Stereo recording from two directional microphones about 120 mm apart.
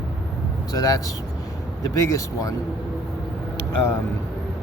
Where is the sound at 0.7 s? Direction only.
30° left (ahead or behind).